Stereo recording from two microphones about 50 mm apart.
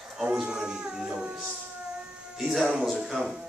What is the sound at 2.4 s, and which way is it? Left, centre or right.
A man's voice, centre.